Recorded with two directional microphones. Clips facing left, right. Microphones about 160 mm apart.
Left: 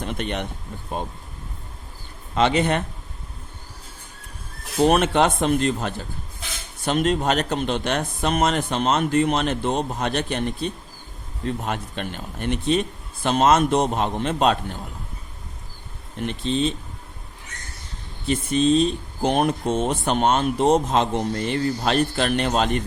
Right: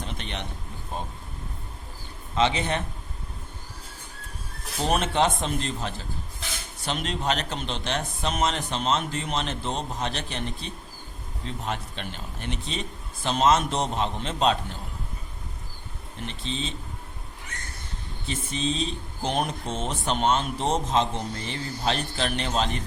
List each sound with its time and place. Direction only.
0.0 s a sound: 55° left (ahead or behind)
2.3 s speech: 55° left (ahead or behind)
4.9 s speech: 60° left (ahead or behind)
16.2 s speech: 55° left (ahead or behind)
18.3 s speech: 55° left (ahead or behind)